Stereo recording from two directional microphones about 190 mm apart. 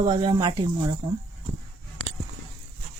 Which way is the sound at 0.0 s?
20° right (ahead or behind).